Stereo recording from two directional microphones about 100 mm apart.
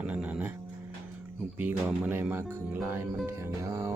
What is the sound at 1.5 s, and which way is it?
Speech, 20° right (ahead or behind).